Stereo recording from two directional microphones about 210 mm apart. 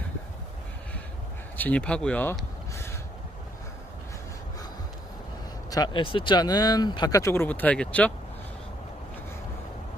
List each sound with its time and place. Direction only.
1.5 s speech: 5° left (ahead or behind)
5.7 s speech: 20° left (ahead or behind)